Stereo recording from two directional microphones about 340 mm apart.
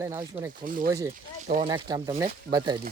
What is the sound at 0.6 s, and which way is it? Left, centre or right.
Speech, right.